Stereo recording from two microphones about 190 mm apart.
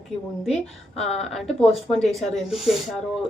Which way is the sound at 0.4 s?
Centre (ahead or behind).